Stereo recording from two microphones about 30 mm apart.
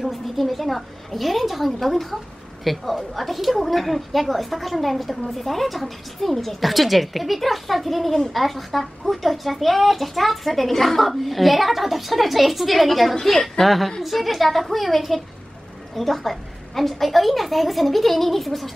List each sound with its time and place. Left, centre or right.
0.0 s a child's voice: centre
14.0 s a child's voice: centre